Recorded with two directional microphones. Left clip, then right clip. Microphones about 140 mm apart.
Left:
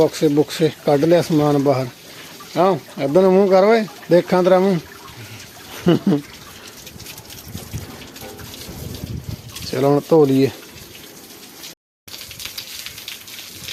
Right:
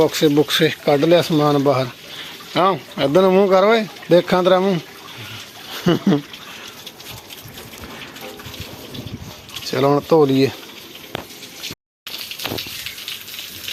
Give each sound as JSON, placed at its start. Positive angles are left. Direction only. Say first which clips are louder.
{"t": 0.0, "sound": "speech", "louder": "right 1 dB", "side_deg": 0}
{"t": 0.9, "sound": "speech", "louder": "even", "side_deg": 30}
{"t": 2.6, "sound": "speech", "louder": "even", "side_deg": 5}
{"t": 5.8, "sound": "speech", "louder": "left 1 dB", "side_deg": 10}
{"t": 9.6, "sound": "speech", "louder": "even", "side_deg": 20}